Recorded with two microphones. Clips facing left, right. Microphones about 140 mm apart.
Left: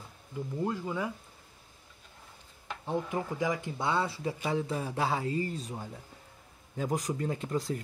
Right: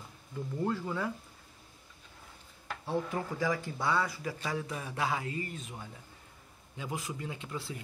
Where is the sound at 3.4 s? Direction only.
20° left (ahead or behind); by 7.8 s 40° left (ahead or behind).